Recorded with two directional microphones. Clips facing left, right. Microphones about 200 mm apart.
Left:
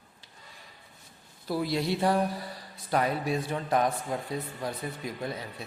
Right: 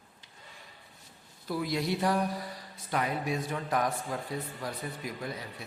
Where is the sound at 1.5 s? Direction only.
30° left (ahead or behind).